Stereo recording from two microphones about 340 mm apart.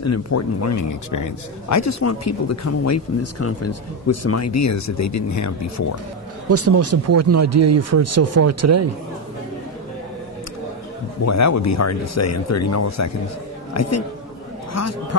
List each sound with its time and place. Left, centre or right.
0.0 s a man's voice: left
6.5 s speech: right
11.2 s a man's voice: left